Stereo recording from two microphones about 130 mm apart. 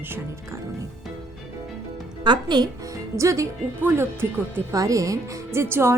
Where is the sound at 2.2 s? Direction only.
35° right (ahead or behind).